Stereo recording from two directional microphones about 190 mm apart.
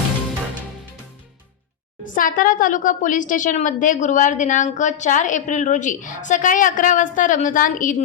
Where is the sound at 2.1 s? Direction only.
45° left (ahead or behind).